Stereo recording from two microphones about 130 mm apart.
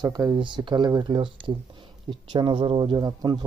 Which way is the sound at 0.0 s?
30° right (ahead or behind).